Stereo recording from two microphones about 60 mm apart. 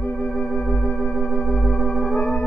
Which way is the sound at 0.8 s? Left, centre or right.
Left.